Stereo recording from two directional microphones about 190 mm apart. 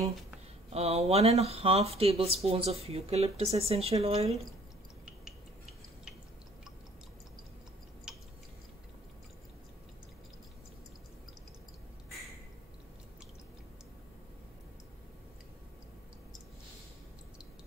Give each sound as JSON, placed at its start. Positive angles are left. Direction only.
{"t": 0.7, "sound": "speech", "side_deg": -30}